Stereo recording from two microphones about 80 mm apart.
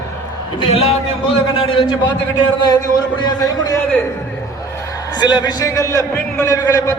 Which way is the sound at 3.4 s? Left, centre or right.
Left.